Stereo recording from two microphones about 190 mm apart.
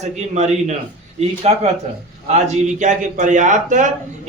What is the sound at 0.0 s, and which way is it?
A man's voice, 35° right (ahead or behind).